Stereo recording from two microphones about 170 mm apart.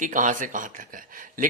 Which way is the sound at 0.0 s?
50° right (ahead or behind).